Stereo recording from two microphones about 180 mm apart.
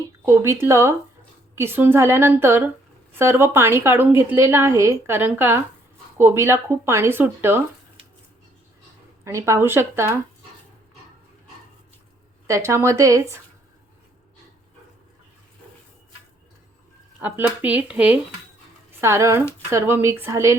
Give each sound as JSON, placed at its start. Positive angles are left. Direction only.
{"t": 0.3, "sound": "a woman's voice", "side_deg": -15}
{"t": 9.2, "sound": "a woman's voice", "side_deg": -15}
{"t": 12.5, "sound": "a woman's voice", "side_deg": -15}
{"t": 17.2, "sound": "a woman's voice", "side_deg": -10}